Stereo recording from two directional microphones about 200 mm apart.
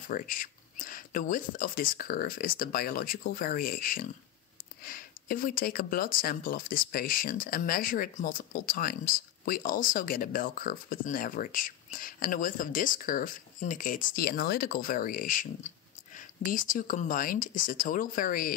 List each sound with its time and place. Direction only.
0.1 s speech: 45° left (ahead or behind)